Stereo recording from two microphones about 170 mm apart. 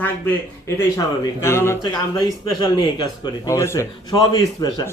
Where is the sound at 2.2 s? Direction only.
25° left (ahead or behind).